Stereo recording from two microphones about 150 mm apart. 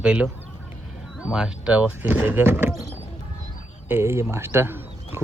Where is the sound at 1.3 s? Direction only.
5° right (ahead or behind).